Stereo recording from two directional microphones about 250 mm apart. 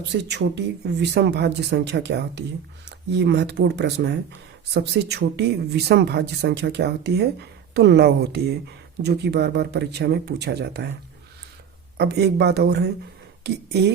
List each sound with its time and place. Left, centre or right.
0.3 s a woman's voice: right
11.9 s a woman's voice: right